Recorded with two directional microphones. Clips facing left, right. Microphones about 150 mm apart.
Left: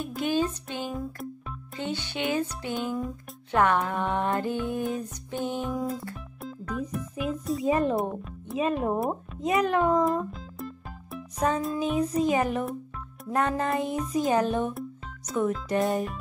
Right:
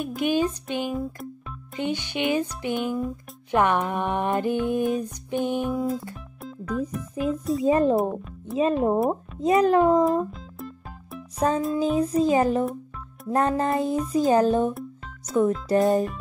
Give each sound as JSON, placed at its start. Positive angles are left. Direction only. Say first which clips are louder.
{"t": 0.0, "sound": "music", "louder": "right 3 dB", "side_deg": -15}
{"t": 5.8, "sound": "speech", "louder": "right 4 dB", "side_deg": 0}
{"t": 6.4, "sound": "music", "louder": "right 4 dB", "side_deg": 0}
{"t": 6.8, "sound": "speech", "louder": "right 4 dB", "side_deg": 0}
{"t": 7.6, "sound": "speech", "louder": "right 4 dB", "side_deg": -25}
{"t": 7.9, "sound": "speech", "louder": "right 5 dB", "side_deg": 0}
{"t": 8.5, "sound": "music", "louder": "right 5 dB", "side_deg": -30}
{"t": 10.0, "sound": "music", "louder": "right 4 dB", "side_deg": 0}
{"t": 11.8, "sound": "music", "louder": "right 3 dB", "side_deg": -35}
{"t": 14.7, "sound": "music", "louder": "right 2 dB", "side_deg": 0}
{"t": 15.8, "sound": "speech", "louder": "right 6 dB", "side_deg": 0}